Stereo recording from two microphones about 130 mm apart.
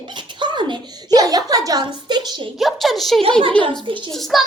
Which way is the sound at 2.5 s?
Centre (ahead or behind).